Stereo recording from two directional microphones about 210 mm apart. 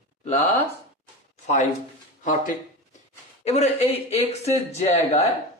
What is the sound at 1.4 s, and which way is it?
A man's voice, 35° left (ahead or behind).